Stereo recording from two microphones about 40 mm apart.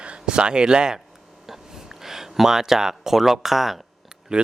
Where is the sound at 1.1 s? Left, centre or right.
Centre.